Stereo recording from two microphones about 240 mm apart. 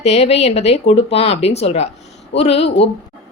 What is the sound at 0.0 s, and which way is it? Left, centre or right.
A woman's voice, left.